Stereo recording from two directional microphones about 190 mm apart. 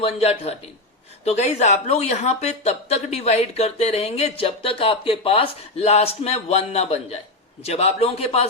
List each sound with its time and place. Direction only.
0.0 s speech: 30° left (ahead or behind)